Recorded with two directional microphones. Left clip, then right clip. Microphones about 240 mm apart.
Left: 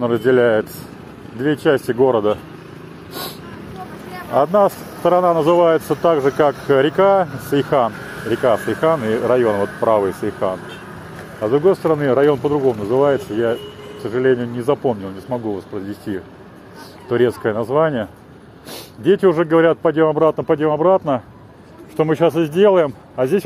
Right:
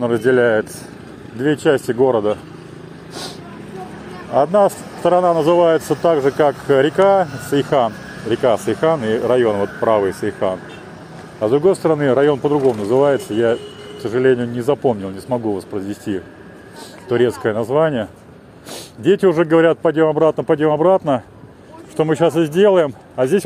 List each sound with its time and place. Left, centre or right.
0.0 s a man's voice: centre
4.3 s a man's voice: centre